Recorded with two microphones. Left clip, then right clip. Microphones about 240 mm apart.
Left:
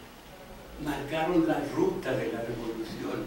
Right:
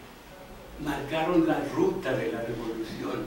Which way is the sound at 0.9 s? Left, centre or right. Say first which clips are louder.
Right 2 dB; centre.